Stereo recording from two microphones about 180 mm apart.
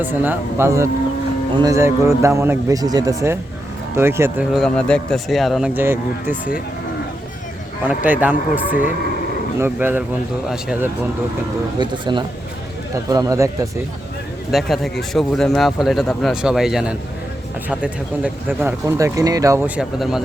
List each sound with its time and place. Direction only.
0.0 s speech: 10° right (ahead or behind)
4.5 s speech: 5° left (ahead or behind)
7.9 s speech: 10° right (ahead or behind)
11.8 s speech: 25° right (ahead or behind)
14.5 s speech: centre (ahead or behind)